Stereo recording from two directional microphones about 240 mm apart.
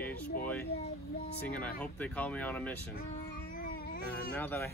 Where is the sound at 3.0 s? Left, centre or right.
Left.